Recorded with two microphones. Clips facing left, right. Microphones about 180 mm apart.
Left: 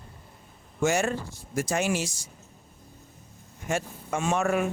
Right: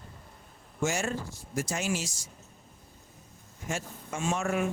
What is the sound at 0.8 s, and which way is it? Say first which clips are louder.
Speech: left 5 dB; 60° left (ahead or behind).